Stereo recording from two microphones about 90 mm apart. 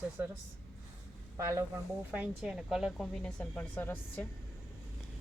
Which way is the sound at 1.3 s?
35° right (ahead or behind).